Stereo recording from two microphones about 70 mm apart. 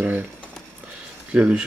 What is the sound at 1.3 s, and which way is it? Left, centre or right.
Speech, centre.